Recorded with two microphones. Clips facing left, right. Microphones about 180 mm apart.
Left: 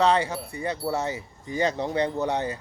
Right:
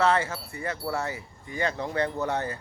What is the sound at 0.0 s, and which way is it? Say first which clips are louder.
Speech: left 2 dB; 15° left (ahead or behind).